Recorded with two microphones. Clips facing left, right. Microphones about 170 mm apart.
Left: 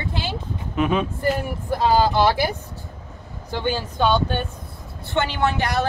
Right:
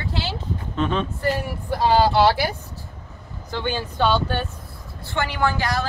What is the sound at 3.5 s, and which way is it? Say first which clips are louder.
Speech: left 2 dB; 10° left (ahead or behind).